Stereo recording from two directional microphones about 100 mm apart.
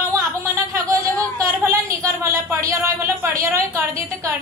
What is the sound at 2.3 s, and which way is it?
A woman's voice, 30° right (ahead or behind).